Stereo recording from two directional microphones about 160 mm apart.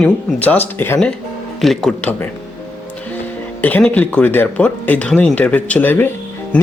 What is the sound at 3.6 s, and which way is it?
Speech, 10° left (ahead or behind).